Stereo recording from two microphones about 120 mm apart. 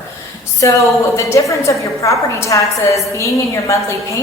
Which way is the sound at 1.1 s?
25° left (ahead or behind).